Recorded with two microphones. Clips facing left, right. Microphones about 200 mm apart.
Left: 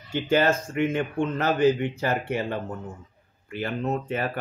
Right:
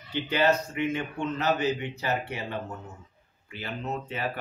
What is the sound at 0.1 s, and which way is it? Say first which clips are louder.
A man's voice: left 3 dB; 50° left (ahead or behind).